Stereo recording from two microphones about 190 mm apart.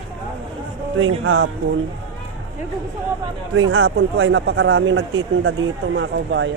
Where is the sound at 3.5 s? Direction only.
90° right; by 6.5 s 75° right (ahead or behind).